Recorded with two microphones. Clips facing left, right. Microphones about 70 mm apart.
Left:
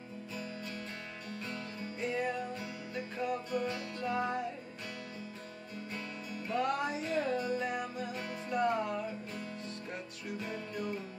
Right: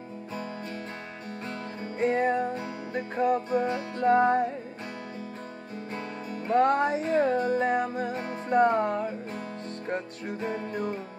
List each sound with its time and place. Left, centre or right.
1.8 s music: right
6.3 s music: right